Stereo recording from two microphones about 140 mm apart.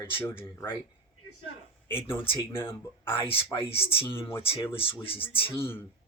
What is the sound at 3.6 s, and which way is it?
Speech, 45° left (ahead or behind).